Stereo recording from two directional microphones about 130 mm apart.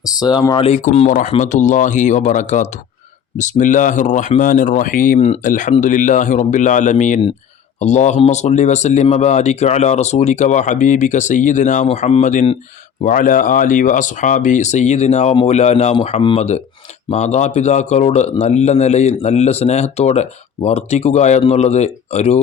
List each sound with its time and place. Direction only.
0.0 s speech: 30° left (ahead or behind)
0.7 s speech: 65° left (ahead or behind); by 5.2 s 90° left
5.4 s a man's voice: 80° left
13.0 s a man's voice: 90° left; by 16.0 s 55° left (ahead or behind)
16.0 s speech: 45° left (ahead or behind)
17.1 s a man's voice: 65° left (ahead or behind)